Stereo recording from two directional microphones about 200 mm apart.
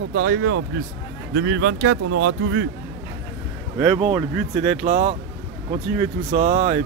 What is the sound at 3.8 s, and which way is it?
Speech, 30° right (ahead or behind).